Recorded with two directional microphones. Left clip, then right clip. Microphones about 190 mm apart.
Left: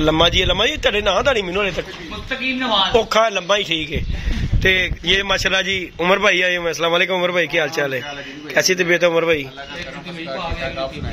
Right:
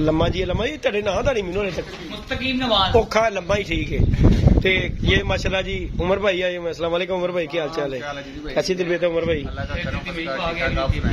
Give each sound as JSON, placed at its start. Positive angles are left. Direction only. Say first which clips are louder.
{"t": 0.0, "sound": "a man's voice", "louder": "left 6 dB", "side_deg": 5}
{"t": 2.4, "sound": "speech", "louder": "left 1 dB", "side_deg": -55}
{"t": 2.9, "sound": "a man's voice", "louder": "left 2 dB", "side_deg": 0}